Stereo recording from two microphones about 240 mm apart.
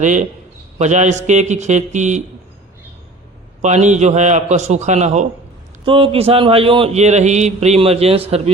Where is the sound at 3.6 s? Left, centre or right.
Right.